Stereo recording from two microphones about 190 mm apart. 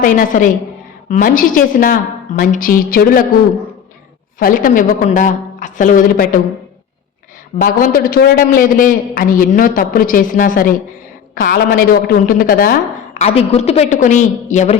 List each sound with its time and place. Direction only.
0.0 s a man's voice: 45° left (ahead or behind)
4.4 s a man's voice: 50° left (ahead or behind)
7.6 s a man's voice: 50° left (ahead or behind)
13.1 s a woman's voice: 35° left (ahead or behind)